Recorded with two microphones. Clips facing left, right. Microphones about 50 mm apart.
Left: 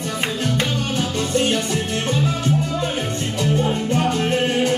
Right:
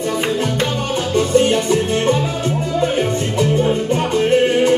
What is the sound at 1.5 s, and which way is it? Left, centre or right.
Music, right.